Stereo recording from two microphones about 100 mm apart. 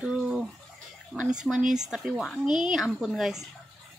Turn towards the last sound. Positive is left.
turn(degrees=-5)  # may be behind; listen again after turning